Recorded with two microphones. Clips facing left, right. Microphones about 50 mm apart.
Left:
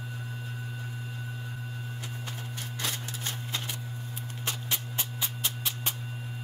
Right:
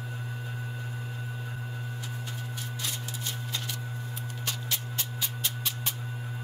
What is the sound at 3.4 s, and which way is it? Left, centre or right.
Printer, left.